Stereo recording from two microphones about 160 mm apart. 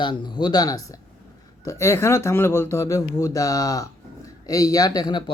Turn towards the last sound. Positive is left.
turn(degrees=25)  # may be behind; listen again after turning